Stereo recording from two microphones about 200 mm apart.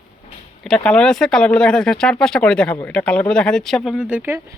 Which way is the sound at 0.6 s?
5° left (ahead or behind).